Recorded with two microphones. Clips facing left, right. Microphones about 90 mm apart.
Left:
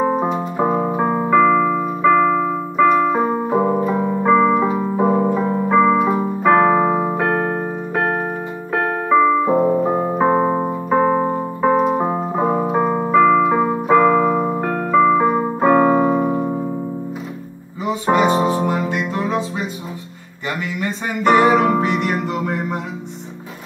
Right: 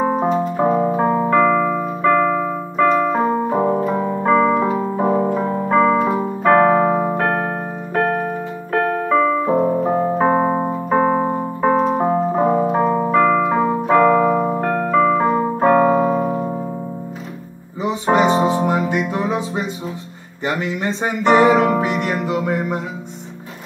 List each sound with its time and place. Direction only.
0.0 s keyboard: centre (ahead or behind)
10.5 s keyboard: 15° right (ahead or behind)
10.9 s keyboard: 5° right (ahead or behind)
17.8 s music: 25° right (ahead or behind)
20.4 s music: 30° right (ahead or behind)
21.4 s music: 5° right (ahead or behind)